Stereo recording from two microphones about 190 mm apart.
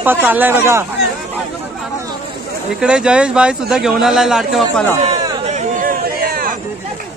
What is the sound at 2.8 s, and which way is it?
Speech, 5° right (ahead or behind).